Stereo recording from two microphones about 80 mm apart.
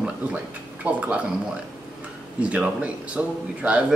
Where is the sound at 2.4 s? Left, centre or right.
Centre.